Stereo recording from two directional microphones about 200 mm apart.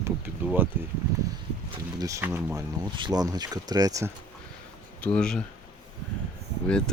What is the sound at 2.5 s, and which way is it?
Speech, 20° right (ahead or behind).